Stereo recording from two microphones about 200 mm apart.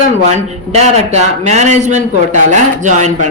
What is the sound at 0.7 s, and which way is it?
Speech, 35° right (ahead or behind).